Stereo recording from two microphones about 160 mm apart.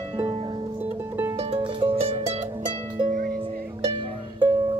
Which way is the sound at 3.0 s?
55° right (ahead or behind).